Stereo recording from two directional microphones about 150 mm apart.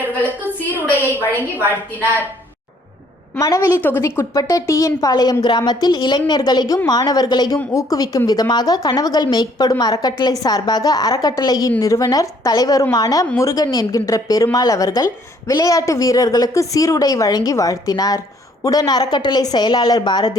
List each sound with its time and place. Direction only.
0.7 s a woman's voice: 10° right (ahead or behind)
3.3 s a woman's voice: 20° left (ahead or behind)